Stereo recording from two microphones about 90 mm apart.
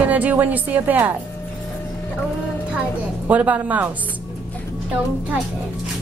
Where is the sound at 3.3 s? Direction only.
15° right (ahead or behind).